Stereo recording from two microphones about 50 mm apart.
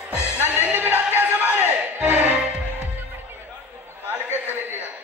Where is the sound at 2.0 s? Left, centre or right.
Right.